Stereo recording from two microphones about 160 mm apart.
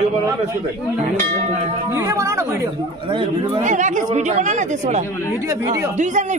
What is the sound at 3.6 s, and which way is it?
Speech, 50° right (ahead or behind).